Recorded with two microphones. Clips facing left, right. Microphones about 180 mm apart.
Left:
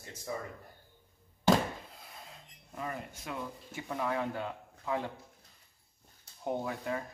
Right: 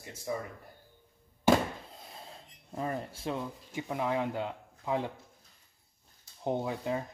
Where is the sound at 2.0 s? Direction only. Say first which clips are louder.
Right 3 dB; 30° right (ahead or behind).